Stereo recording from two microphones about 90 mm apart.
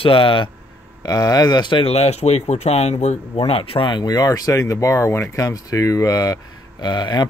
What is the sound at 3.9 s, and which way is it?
Speech, 45° left (ahead or behind).